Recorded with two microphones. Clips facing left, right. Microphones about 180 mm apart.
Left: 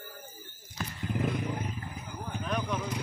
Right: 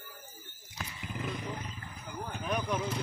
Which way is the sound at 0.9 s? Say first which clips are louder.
Left 7 dB; 55° left (ahead or behind).